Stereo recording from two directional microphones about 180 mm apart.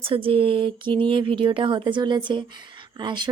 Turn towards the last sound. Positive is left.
turn(degrees=-25)  # may be behind; listen again after turning